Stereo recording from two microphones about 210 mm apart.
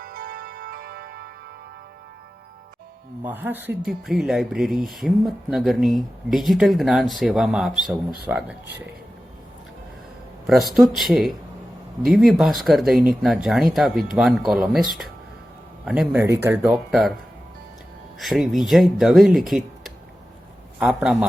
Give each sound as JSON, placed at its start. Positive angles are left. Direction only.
{"t": 0.0, "sound": "music", "side_deg": -45}
{"t": 3.2, "sound": "speech", "side_deg": -10}
{"t": 10.4, "sound": "speech", "side_deg": 0}
{"t": 18.2, "sound": "speech", "side_deg": 0}